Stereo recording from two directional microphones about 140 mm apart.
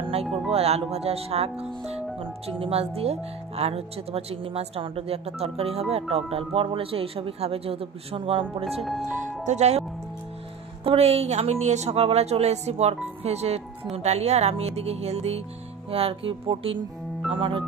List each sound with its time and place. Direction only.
0.0 s music: 45° right (ahead or behind)
0.5 s speech: 45° right (ahead or behind)